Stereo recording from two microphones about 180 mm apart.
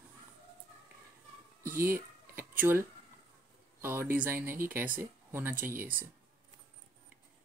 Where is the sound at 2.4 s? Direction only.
10° right (ahead or behind).